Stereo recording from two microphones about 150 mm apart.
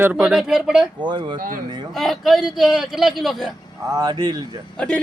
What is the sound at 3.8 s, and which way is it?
Speech, 25° right (ahead or behind).